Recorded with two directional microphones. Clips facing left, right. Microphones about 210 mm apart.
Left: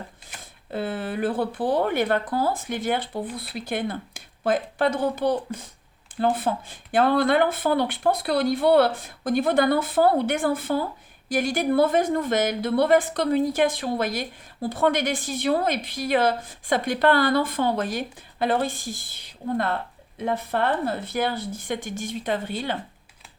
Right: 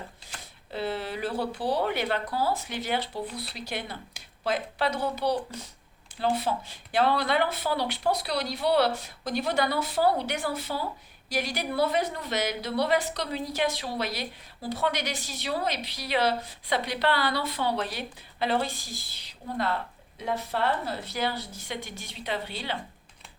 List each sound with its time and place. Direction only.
0.7 s a woman's voice: 50° left (ahead or behind)